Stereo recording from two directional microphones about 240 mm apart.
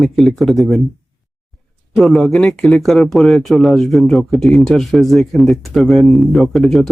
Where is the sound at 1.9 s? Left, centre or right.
Centre.